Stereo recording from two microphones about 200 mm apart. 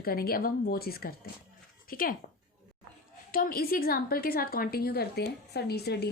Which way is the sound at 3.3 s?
45° left (ahead or behind).